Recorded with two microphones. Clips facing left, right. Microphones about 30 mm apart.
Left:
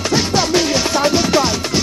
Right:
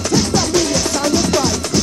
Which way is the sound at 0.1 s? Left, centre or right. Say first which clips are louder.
Even; left.